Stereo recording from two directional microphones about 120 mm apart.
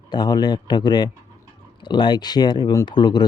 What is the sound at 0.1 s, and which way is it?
Speech, 35° left (ahead or behind).